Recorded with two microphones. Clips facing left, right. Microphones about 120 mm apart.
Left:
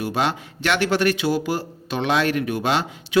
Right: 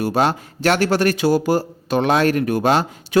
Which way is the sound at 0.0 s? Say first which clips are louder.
Right 5 dB; 40° right (ahead or behind).